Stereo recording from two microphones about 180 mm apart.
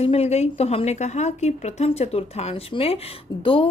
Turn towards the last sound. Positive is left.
turn(degrees=30)  # may be behind; listen again after turning